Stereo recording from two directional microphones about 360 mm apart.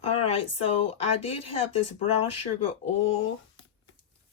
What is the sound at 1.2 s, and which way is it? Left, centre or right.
Speech, left.